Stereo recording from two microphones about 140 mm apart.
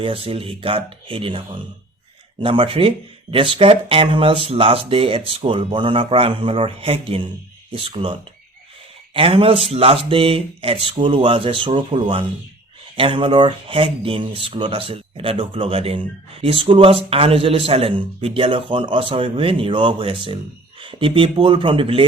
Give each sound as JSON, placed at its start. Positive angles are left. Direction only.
{"t": 0.0, "sound": "speech", "side_deg": -40}